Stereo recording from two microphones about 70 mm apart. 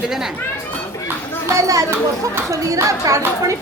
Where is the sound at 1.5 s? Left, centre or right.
Right.